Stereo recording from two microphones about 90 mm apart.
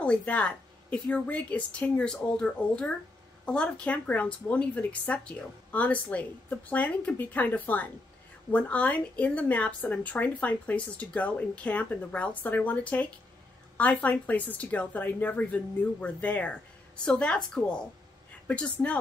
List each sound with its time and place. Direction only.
0.0 s speech: 15° left (ahead or behind)